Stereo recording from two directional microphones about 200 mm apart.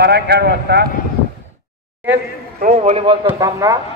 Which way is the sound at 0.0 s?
55° right (ahead or behind).